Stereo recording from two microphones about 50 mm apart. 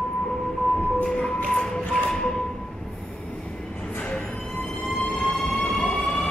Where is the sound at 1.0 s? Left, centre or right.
Centre.